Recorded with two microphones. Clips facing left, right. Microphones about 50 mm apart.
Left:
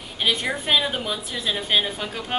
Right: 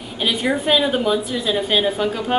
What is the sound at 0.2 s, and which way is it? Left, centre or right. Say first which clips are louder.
A woman's voice: right 4 dB; centre.